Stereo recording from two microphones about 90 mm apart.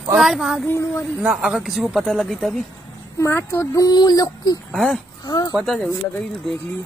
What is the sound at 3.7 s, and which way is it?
Speech, 45° left (ahead or behind).